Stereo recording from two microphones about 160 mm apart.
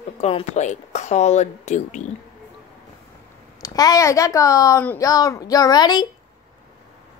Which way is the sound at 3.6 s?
25° left (ahead or behind).